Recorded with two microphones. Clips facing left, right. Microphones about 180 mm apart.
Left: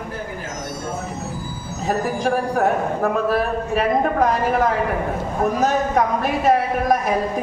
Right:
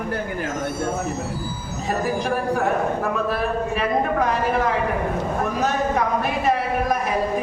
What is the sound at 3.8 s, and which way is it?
A man's voice, 45° left (ahead or behind).